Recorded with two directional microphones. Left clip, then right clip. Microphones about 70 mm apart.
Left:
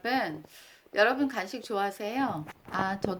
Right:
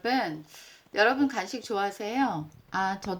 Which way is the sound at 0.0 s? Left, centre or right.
Right.